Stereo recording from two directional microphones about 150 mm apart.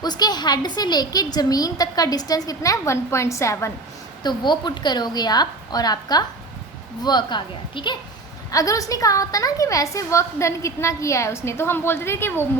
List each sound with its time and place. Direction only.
0.0 s a woman's voice: 25° left (ahead or behind)